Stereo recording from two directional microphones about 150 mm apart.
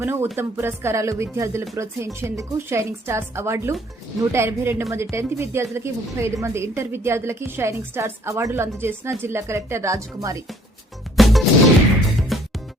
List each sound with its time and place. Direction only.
0.0 s a woman's voice: 15° right (ahead or behind)
11.2 s music: centre (ahead or behind)